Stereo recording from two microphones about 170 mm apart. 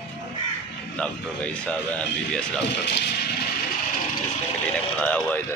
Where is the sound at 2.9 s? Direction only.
75° left (ahead or behind).